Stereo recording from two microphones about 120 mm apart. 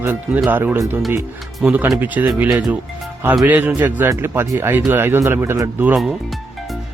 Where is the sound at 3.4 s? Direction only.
15° right (ahead or behind).